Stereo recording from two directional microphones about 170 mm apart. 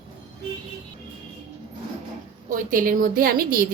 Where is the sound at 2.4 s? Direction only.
55° right (ahead or behind).